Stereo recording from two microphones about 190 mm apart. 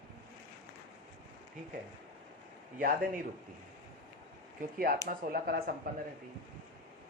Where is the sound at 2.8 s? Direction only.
45° right (ahead or behind).